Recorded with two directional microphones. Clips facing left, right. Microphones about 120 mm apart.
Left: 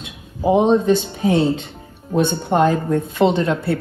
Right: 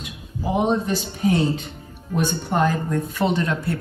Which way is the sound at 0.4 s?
25° left (ahead or behind).